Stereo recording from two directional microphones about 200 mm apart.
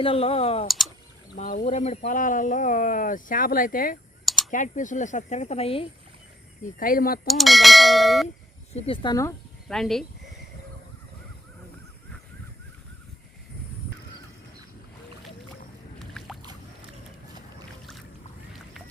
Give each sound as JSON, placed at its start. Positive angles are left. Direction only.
{"t": 0.0, "sound": "speech", "side_deg": 30}
{"t": 1.4, "sound": "speech", "side_deg": 40}
{"t": 6.6, "sound": "speech", "side_deg": 45}
{"t": 7.3, "sound": "speech", "side_deg": 0}
{"t": 8.7, "sound": "speech", "side_deg": 25}
{"t": 9.6, "sound": "speech", "side_deg": 0}
{"t": 16.1, "sound": "boat", "side_deg": 0}